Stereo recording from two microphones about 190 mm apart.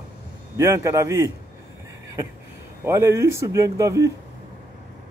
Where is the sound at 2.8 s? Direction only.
15° right (ahead or behind).